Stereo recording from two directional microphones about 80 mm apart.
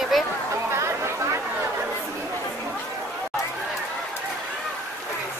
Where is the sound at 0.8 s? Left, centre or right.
Right.